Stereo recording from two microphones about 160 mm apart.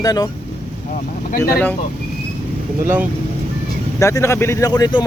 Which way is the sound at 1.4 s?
15° left (ahead or behind).